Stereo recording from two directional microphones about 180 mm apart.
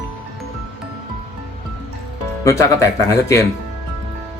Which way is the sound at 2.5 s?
15° left (ahead or behind).